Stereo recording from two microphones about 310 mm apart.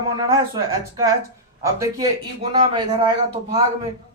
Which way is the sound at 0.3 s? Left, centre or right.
Centre.